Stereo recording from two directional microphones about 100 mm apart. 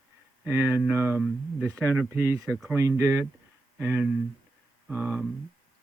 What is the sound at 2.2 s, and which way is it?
Speech, 30° right (ahead or behind).